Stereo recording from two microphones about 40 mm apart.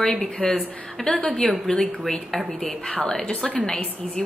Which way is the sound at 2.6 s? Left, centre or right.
Left.